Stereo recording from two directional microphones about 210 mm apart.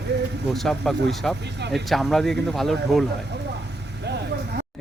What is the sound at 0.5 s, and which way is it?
Speech, centre (ahead or behind).